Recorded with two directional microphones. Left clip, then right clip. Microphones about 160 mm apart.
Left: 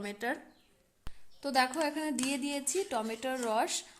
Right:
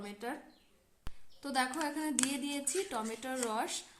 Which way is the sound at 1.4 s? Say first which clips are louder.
Left 5 dB; 35° left (ahead or behind).